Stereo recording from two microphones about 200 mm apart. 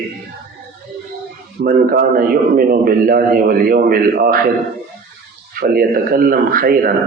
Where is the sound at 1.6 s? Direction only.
50° right (ahead or behind).